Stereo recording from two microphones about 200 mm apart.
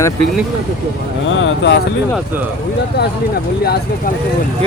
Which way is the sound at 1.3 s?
70° left (ahead or behind).